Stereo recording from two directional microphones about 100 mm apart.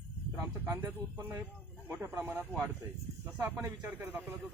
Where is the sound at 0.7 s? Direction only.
25° right (ahead or behind).